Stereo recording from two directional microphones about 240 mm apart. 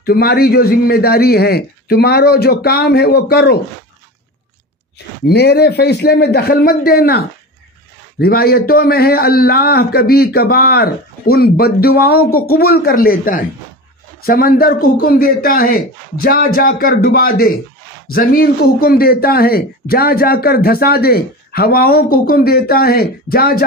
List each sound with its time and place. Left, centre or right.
0.0 s a man's voice: left
5.2 s a man's voice: left